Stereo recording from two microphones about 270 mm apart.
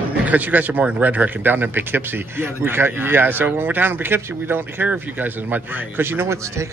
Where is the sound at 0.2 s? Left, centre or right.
Centre.